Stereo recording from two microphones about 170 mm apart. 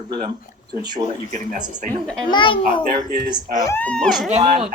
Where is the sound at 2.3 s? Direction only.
30° left (ahead or behind).